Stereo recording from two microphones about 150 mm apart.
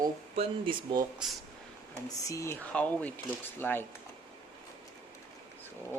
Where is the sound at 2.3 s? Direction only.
20° left (ahead or behind).